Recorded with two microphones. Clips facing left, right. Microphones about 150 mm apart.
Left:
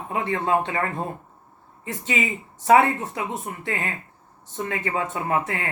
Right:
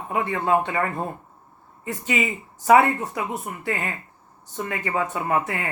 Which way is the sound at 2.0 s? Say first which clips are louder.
Right 1 dB; 30° left (ahead or behind).